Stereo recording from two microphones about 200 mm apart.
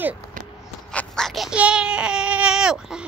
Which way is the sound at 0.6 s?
5° left (ahead or behind).